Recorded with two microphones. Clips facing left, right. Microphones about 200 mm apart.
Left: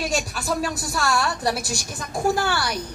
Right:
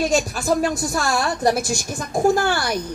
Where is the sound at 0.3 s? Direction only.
45° right (ahead or behind).